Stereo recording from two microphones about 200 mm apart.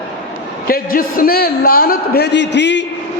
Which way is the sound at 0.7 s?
45° left (ahead or behind).